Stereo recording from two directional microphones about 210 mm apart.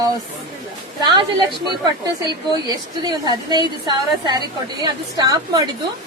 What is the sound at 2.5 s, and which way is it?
A woman's voice, 20° right (ahead or behind).